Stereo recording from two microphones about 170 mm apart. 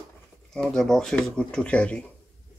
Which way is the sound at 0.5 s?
5° left (ahead or behind).